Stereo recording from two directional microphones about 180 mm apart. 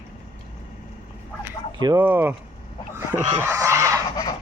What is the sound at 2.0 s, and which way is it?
Speech, 10° right (ahead or behind).